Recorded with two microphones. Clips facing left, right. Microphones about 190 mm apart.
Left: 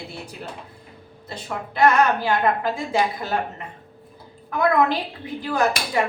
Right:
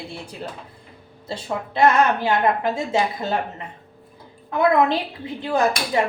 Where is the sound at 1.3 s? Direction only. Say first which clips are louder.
Right 4 dB; 25° right (ahead or behind).